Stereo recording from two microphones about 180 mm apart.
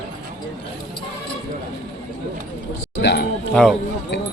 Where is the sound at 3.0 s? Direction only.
65° left (ahead or behind).